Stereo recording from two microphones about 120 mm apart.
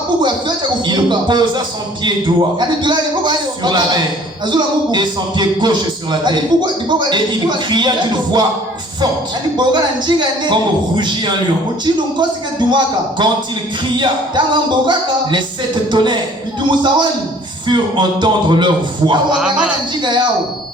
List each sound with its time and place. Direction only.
0.2 s speech: 40° right (ahead or behind)
9.6 s speech: 40° right (ahead or behind)
19.4 s speech: 5° right (ahead or behind)
20.0 s speech: 40° right (ahead or behind)